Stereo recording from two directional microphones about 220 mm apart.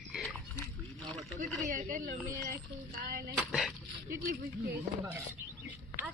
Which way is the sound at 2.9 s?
40° right (ahead or behind).